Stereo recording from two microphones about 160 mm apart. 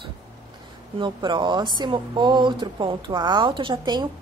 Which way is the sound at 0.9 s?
30° right (ahead or behind).